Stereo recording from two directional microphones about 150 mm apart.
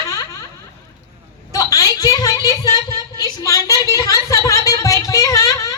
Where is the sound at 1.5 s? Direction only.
25° left (ahead or behind).